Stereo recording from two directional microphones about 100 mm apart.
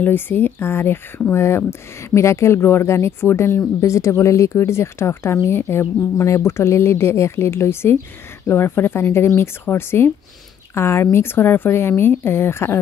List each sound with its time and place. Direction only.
0.0 s speech: 20° left (ahead or behind)